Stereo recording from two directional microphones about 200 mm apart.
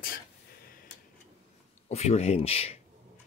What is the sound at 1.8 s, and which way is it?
Speech, 30° left (ahead or behind).